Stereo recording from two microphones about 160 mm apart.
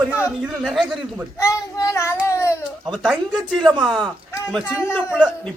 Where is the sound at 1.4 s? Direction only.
20° left (ahead or behind).